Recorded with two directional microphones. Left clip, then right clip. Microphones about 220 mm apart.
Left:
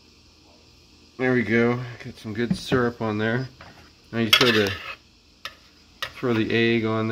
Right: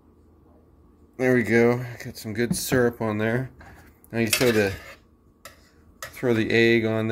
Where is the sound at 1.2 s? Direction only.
5° right (ahead or behind).